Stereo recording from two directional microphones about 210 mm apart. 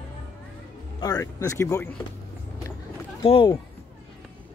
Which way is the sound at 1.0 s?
15° left (ahead or behind).